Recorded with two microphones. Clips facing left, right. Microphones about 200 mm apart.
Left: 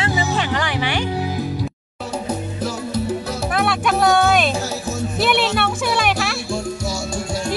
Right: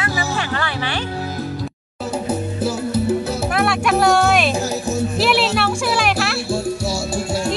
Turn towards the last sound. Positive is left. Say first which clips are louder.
# right 3 dB
turn(degrees=-5)  # may be behind; listen again after turning